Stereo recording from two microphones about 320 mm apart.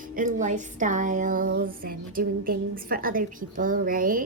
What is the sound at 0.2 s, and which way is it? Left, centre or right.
A woman's voice, right.